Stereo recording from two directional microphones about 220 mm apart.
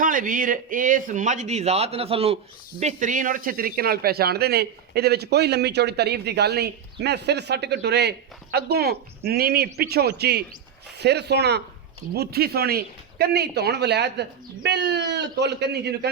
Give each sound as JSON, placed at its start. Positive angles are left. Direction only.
{"t": 0.0, "sound": "speech", "side_deg": -35}